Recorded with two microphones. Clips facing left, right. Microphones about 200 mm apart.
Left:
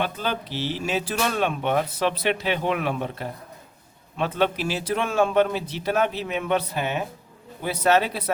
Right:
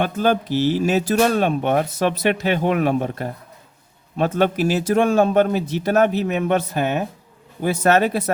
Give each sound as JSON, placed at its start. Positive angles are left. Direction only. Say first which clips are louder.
{"t": 0.0, "sound": "speech", "louder": "right 8 dB", "side_deg": -50}